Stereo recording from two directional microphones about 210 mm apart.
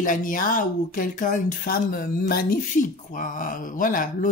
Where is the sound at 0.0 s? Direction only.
40° left (ahead or behind).